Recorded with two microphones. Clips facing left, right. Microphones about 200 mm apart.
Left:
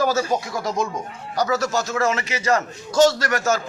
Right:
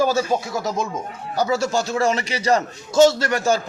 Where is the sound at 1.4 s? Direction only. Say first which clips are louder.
Right 1 dB; 25° right (ahead or behind).